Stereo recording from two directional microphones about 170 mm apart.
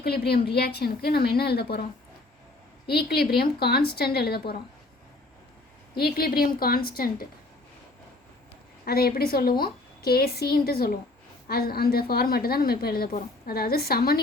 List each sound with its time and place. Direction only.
0.0 s a woman's voice: 70° left (ahead or behind)
2.9 s a woman's voice: 70° left (ahead or behind)
5.9 s a woman's voice: 65° left (ahead or behind)
8.8 s a woman's voice: 65° left (ahead or behind)